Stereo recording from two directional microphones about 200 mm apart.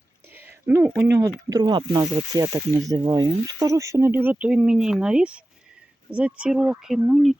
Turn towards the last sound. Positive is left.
turn(degrees=0)  # may be behind; listen again after turning